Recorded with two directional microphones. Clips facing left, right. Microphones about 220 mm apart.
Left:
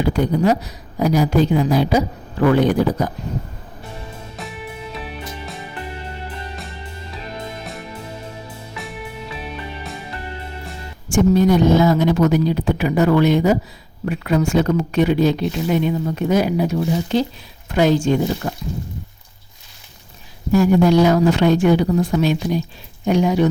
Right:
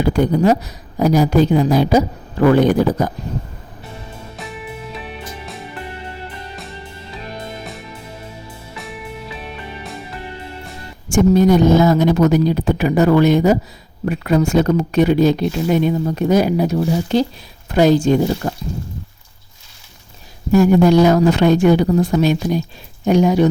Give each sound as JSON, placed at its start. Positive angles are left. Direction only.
{"t": 0.1, "sound": "a woman's voice", "side_deg": -45}
{"t": 4.4, "sound": "music", "side_deg": 0}
{"t": 11.1, "sound": "a woman's voice", "side_deg": -45}
{"t": 20.5, "sound": "a woman's voice", "side_deg": -50}